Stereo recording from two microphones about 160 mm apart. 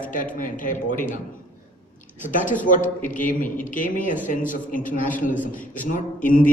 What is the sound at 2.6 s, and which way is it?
A man's voice, 55° left (ahead or behind).